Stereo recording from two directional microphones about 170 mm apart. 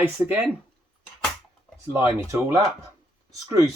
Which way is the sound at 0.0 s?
10° right (ahead or behind).